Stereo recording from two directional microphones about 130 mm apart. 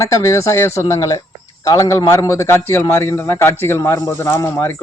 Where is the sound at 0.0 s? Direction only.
20° left (ahead or behind).